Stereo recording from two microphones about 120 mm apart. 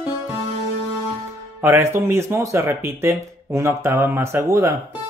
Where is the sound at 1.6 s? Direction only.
20° right (ahead or behind).